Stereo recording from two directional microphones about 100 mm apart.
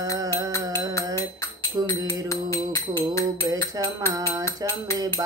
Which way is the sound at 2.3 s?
30° left (ahead or behind).